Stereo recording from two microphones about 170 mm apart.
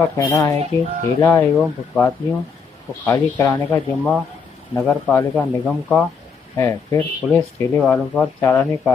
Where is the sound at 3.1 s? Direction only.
10° left (ahead or behind).